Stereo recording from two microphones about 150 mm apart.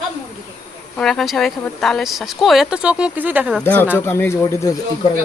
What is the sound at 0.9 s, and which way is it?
Speech, centre (ahead or behind).